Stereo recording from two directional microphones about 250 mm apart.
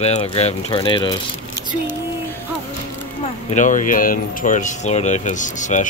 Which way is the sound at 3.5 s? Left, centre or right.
Left.